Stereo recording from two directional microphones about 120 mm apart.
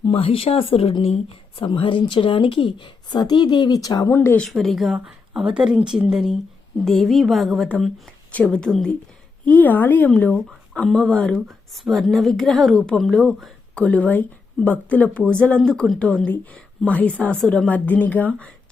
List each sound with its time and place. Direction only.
0.0 s speech: 45° left (ahead or behind); by 4.4 s 20° left (ahead or behind)
4.4 s speech: centre (ahead or behind)
9.5 s speech: 15° left (ahead or behind)